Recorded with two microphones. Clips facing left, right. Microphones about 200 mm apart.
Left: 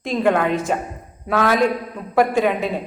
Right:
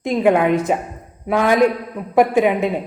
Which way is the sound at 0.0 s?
15° right (ahead or behind).